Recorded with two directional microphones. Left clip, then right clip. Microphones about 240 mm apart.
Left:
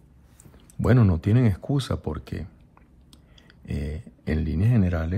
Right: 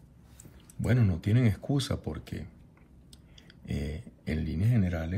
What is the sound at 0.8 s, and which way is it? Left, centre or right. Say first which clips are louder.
Speech: left 9 dB; centre.